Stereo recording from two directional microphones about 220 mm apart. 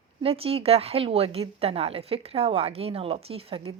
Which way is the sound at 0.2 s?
25° right (ahead or behind).